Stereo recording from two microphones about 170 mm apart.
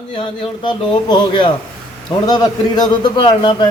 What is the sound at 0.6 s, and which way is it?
A man's voice, 25° left (ahead or behind).